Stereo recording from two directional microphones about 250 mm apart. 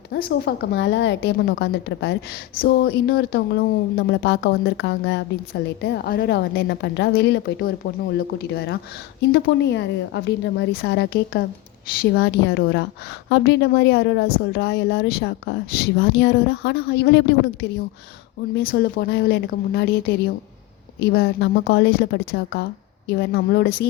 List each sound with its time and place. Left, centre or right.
0.1 s a woman's voice: left